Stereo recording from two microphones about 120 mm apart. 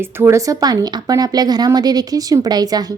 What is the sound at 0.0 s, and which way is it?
A woman's voice, 20° right (ahead or behind).